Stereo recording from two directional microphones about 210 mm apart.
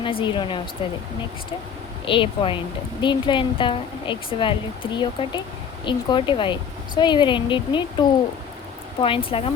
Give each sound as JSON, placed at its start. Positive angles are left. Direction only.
{"t": 0.0, "sound": "speech", "side_deg": 25}
{"t": 2.0, "sound": "speech", "side_deg": 25}
{"t": 9.0, "sound": "speech", "side_deg": 25}